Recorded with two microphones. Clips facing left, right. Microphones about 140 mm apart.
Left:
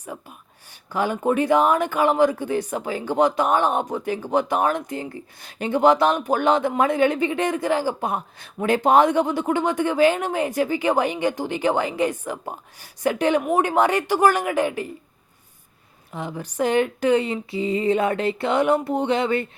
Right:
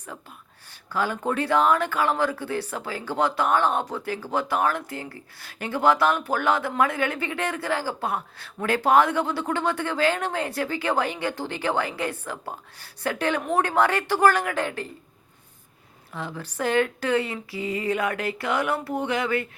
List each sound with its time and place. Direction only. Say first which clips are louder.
0.0 s speech: left 4 dB; 15° left (ahead or behind)
16.1 s speech: left 5 dB; 15° left (ahead or behind)